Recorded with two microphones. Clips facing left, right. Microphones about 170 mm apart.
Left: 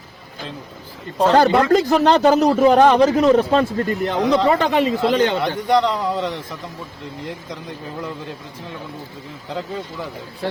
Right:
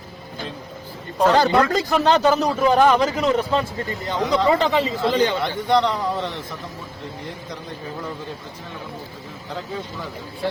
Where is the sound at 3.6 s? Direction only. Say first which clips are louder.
Left 7 dB; 65° left (ahead or behind).